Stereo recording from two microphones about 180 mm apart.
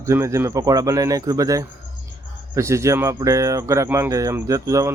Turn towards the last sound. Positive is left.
turn(degrees=-15)  # may be behind; listen again after turning